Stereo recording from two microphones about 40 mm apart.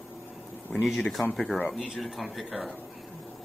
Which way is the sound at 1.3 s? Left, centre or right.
Centre.